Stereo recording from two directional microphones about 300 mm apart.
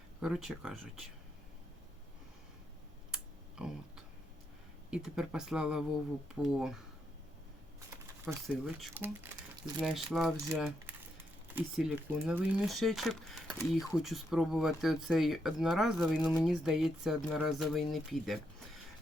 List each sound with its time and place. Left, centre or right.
0.2 s speech: centre
3.6 s speech: centre
4.9 s speech: centre
8.4 s speech: centre